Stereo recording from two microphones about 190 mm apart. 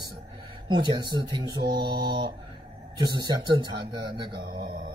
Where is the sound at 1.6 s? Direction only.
60° right (ahead or behind).